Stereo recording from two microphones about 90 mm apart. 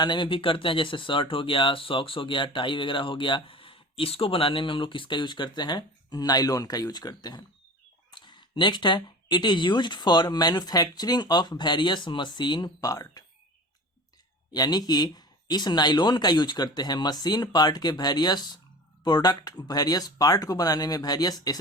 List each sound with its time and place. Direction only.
0.0 s speech: 60° left (ahead or behind)
12.8 s speech: 40° left (ahead or behind)
14.5 s speech: 45° left (ahead or behind)